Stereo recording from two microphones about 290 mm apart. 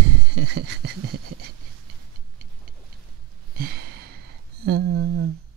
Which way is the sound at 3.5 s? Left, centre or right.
Right.